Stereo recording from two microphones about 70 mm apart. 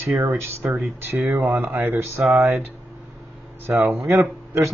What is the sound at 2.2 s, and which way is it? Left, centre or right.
Speech, centre.